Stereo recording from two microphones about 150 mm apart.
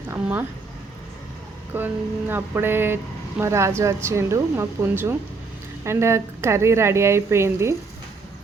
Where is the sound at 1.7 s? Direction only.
15° right (ahead or behind).